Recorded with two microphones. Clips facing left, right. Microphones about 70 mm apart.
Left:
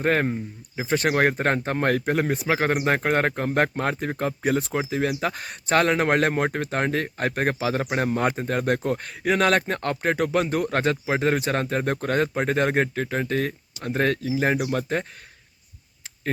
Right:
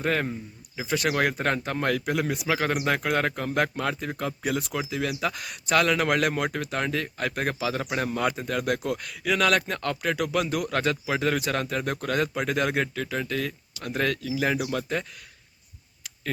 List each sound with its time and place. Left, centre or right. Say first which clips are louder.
0.0 s speech: left 4 dB; left